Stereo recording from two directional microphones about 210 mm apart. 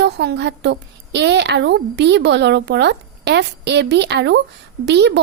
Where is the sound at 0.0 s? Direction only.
50° right (ahead or behind).